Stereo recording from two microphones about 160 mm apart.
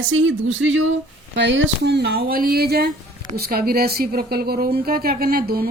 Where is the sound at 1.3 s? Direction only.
90° right.